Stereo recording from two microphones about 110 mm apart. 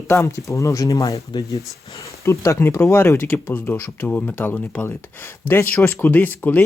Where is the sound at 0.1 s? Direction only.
25° left (ahead or behind).